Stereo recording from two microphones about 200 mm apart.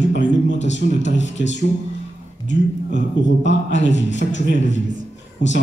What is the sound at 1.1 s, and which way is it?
Speech, 65° left (ahead or behind).